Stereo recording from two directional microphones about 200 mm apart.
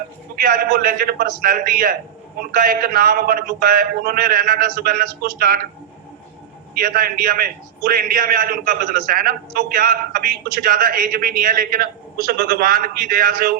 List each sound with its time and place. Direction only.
0.4 s a man's voice: 45° right (ahead or behind)
6.7 s a man's voice: 45° right (ahead or behind)